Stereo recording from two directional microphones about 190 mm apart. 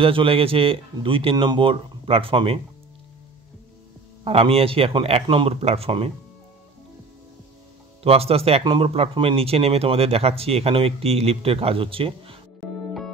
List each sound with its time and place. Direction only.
0.0 s speech: 30° right (ahead or behind)
4.2 s speech: 30° right (ahead or behind)
8.0 s speech: 30° right (ahead or behind)